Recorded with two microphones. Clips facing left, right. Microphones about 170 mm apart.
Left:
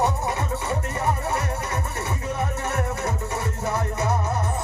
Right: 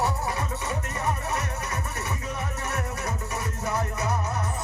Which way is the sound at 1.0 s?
30° left (ahead or behind).